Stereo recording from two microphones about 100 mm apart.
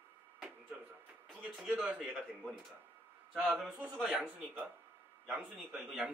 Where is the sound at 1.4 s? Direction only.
10° right (ahead or behind).